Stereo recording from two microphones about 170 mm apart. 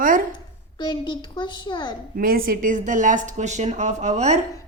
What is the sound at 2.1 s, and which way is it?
Speech, 60° right (ahead or behind).